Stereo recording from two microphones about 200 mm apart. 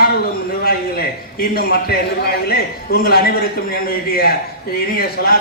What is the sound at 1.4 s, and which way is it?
A man's voice, 50° left (ahead or behind).